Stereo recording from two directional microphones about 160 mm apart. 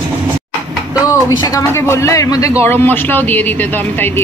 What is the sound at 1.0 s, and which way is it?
A woman's voice, 20° left (ahead or behind).